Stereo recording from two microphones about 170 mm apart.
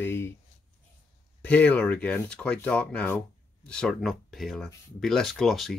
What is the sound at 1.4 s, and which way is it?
Speech, 10° left (ahead or behind).